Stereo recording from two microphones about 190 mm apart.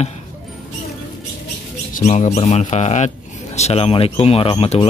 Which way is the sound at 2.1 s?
35° left (ahead or behind).